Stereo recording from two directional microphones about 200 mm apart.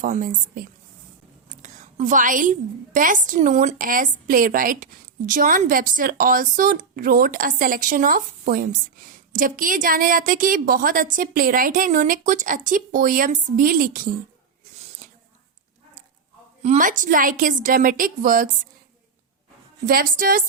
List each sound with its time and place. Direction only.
0.0 s a woman's voice: 40° right (ahead or behind)
14.8 s a sound: 30° right (ahead or behind)
16.6 s a woman's voice: 40° right (ahead or behind)
19.8 s a woman's voice: 45° right (ahead or behind)